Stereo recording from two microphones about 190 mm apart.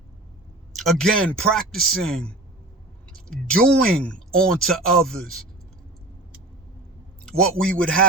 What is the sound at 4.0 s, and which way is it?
Speech, 5° left (ahead or behind).